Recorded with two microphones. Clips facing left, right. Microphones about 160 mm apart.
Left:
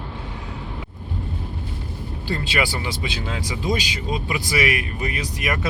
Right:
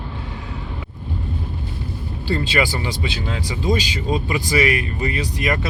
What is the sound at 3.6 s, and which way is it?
Speech, 10° left (ahead or behind).